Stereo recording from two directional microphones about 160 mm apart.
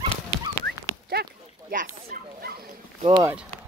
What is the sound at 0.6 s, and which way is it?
Dog, 80° right.